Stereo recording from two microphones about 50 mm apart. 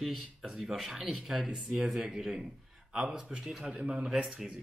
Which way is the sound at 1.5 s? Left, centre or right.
Centre.